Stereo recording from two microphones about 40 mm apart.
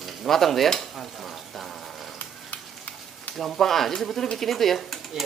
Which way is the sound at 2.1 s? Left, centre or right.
Left.